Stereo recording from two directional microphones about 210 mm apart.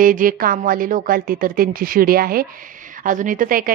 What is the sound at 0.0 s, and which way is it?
A woman's voice, 40° right (ahead or behind).